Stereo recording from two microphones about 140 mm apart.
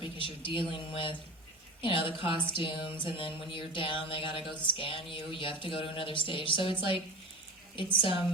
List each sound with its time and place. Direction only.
0.0 s speech: 40° left (ahead or behind)